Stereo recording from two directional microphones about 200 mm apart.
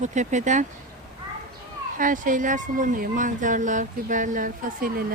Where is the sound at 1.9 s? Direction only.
40° right (ahead or behind).